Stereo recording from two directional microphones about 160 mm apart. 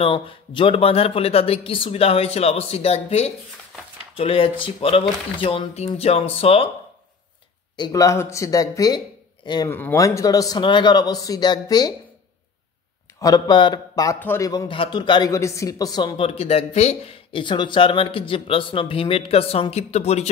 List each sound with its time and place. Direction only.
0.0 s speech: 35° left (ahead or behind)
7.7 s speech: 25° left (ahead or behind)
9.7 s a man's voice: 15° left (ahead or behind)
13.2 s a man's voice: 25° left (ahead or behind); by 20.2 s 40° left (ahead or behind)